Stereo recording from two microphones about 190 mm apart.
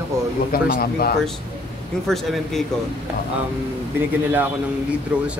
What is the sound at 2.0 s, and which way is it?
Speech, centre (ahead or behind).